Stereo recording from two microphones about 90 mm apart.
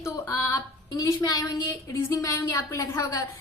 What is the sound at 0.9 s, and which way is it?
A woman's voice, 45° left (ahead or behind).